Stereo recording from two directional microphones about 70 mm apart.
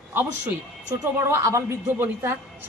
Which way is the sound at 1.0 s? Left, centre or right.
Right.